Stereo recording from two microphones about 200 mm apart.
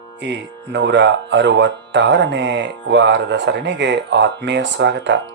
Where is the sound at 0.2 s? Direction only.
60° right (ahead or behind).